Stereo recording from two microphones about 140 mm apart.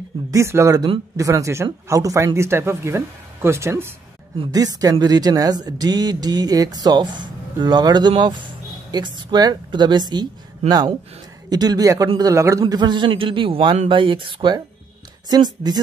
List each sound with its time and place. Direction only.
0.3 s a man's voice: 20° right (ahead or behind)